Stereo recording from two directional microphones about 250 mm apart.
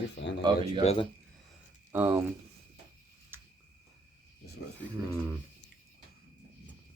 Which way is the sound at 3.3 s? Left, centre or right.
Centre.